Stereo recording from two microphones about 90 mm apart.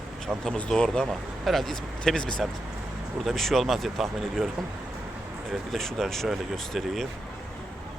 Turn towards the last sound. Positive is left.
turn(degrees=0)  # may be behind; listen again after turning